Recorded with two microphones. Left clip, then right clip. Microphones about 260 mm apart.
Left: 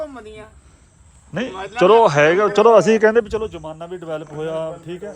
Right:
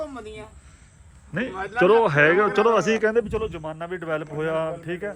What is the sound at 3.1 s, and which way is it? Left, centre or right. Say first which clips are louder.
Speech: left 6 dB; left.